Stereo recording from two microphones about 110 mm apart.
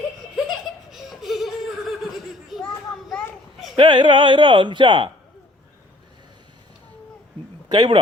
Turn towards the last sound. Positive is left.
turn(degrees=-40)  # may be behind; listen again after turning